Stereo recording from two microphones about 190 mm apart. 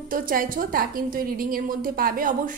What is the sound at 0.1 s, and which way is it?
A woman's voice, 45° right (ahead or behind).